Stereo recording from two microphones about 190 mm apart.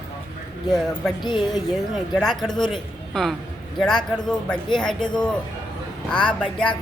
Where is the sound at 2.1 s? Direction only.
Centre (ahead or behind).